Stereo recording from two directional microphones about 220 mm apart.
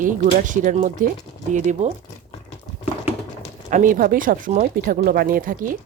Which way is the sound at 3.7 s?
35° right (ahead or behind).